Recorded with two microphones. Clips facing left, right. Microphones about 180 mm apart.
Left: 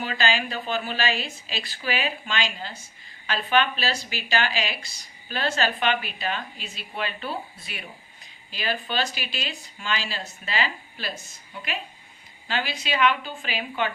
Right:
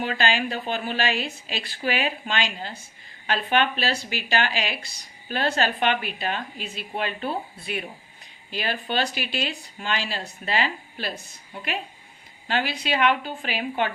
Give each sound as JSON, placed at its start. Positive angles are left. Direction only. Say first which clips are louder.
{"t": 0.0, "sound": "speech", "louder": "right 2 dB", "side_deg": -55}